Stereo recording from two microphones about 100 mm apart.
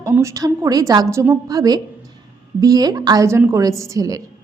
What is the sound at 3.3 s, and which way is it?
Speech, 25° right (ahead or behind).